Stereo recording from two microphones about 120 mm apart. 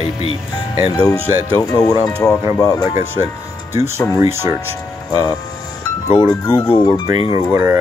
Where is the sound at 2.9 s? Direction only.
20° right (ahead or behind).